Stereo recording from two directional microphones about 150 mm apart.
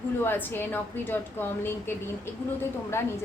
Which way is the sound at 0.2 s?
15° left (ahead or behind).